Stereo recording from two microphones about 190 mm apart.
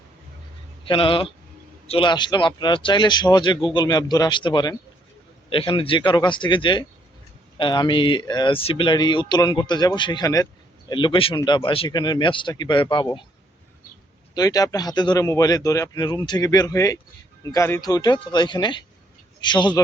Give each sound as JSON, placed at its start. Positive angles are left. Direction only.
{"t": 0.9, "sound": "speech", "side_deg": 25}
{"t": 14.3, "sound": "speech", "side_deg": 20}